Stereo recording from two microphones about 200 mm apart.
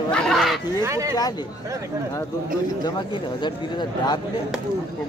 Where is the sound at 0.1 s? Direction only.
Centre (ahead or behind).